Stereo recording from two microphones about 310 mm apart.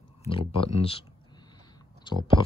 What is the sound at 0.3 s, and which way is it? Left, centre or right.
Speech, centre.